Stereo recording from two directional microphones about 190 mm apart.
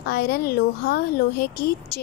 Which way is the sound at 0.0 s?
55° left (ahead or behind).